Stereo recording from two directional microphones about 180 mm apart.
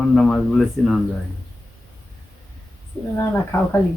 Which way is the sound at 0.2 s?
Centre (ahead or behind).